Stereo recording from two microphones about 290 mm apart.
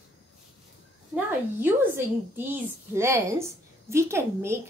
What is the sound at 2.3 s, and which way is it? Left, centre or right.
A woman's voice, centre.